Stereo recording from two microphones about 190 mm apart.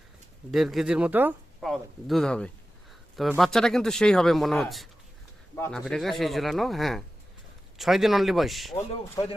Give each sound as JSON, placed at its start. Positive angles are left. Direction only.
{"t": 0.5, "sound": "speech", "side_deg": 0}
{"t": 5.5, "sound": "speech", "side_deg": 10}
{"t": 5.8, "sound": "speech", "side_deg": 0}
{"t": 8.7, "sound": "a man's voice", "side_deg": 25}